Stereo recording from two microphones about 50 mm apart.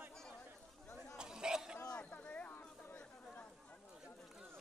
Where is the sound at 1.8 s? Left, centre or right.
Left.